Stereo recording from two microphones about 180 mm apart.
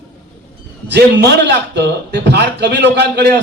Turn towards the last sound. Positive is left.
turn(degrees=-70)  # may be behind; listen again after turning